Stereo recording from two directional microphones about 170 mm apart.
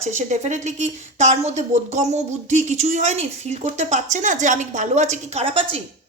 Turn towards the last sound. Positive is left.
turn(degrees=-35)  # may be behind; listen again after turning